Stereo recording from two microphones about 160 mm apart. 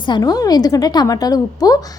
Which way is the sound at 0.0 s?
25° left (ahead or behind).